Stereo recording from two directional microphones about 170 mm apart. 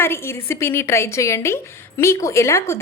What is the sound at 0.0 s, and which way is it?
A woman's voice, 15° left (ahead or behind).